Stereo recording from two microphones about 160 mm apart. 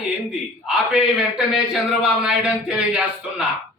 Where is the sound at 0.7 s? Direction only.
5° right (ahead or behind).